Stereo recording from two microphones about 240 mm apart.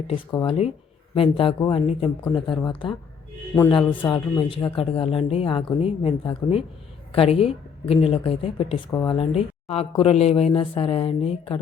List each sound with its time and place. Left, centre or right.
0.1 s a woman's voice: centre